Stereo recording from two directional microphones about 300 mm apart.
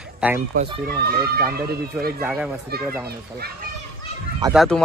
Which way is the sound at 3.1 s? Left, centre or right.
Right.